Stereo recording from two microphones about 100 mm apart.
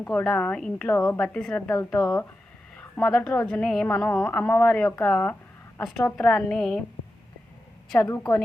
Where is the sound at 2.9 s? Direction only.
10° left (ahead or behind).